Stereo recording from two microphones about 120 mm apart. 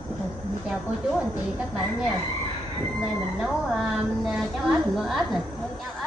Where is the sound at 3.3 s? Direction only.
5° right (ahead or behind).